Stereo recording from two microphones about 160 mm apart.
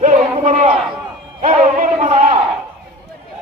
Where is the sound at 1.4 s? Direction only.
55° right (ahead or behind).